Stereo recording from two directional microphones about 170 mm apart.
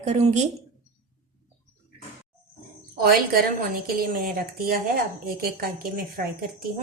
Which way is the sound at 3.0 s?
60° right (ahead or behind).